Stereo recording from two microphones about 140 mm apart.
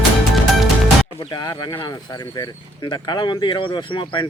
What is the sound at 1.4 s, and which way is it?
Speech, 30° left (ahead or behind).